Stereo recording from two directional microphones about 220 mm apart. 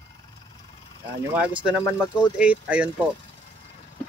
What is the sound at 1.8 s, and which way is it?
Speech, 10° left (ahead or behind).